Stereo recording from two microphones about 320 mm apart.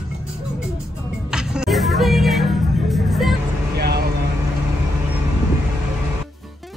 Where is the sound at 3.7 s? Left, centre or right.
Right.